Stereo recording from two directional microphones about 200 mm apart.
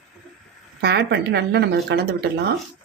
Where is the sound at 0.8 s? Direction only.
55° right (ahead or behind).